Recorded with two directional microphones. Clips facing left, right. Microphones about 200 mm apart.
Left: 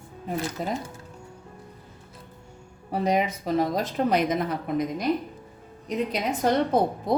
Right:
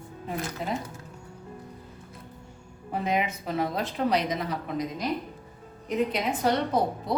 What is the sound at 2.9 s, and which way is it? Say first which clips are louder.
A woman's voice: left 4 dB; 40° left (ahead or behind).